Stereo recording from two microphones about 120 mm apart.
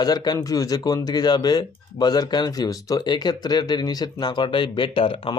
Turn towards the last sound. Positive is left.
turn(degrees=50)  # may be behind; listen again after turning